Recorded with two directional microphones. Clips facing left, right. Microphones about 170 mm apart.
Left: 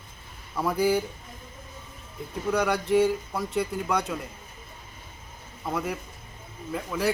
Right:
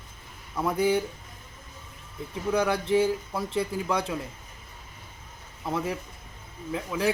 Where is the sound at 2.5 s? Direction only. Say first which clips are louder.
Left 1 dB; 25° right (ahead or behind).